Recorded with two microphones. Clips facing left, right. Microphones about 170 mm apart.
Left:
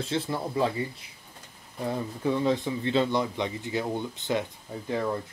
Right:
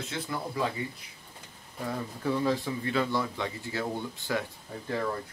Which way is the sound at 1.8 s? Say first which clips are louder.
Left 3 dB; 20° left (ahead or behind).